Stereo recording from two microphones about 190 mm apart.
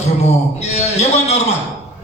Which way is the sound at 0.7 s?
35° left (ahead or behind).